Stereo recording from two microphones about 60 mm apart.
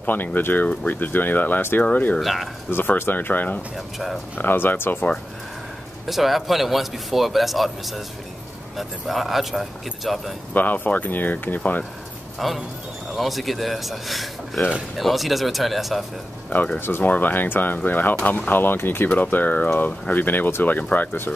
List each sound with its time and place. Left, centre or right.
0.0 s speech: left
2.1 s speech: centre
2.7 s speech: left
3.7 s speech: centre
4.4 s speech: left
6.0 s speech: centre
10.5 s speech: left
12.4 s speech: centre
16.4 s speech: left
16.8 s speech: left